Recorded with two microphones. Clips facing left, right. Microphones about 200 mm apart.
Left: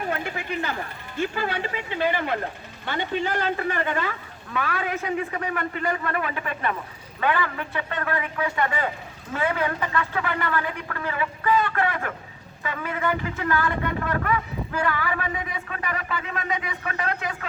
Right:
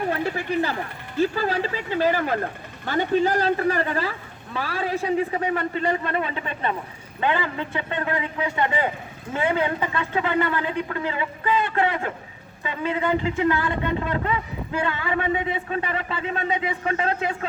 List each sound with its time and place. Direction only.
0.1 s speech: 35° right (ahead or behind)